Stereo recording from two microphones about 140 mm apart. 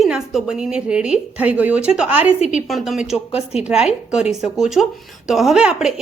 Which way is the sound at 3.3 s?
45° left (ahead or behind).